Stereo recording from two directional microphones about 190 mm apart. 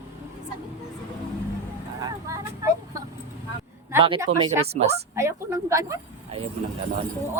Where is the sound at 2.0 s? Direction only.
20° right (ahead or behind).